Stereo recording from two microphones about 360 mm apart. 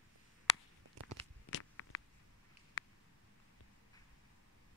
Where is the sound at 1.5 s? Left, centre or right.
Left.